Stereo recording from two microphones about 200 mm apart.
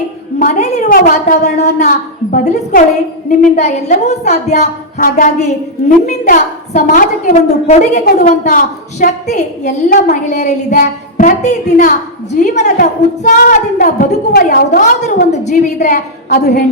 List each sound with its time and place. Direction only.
0.3 s a sound: 40° left (ahead or behind)
2.3 s a woman's voice: 40° left (ahead or behind)
16.4 s a woman's voice: 55° left (ahead or behind)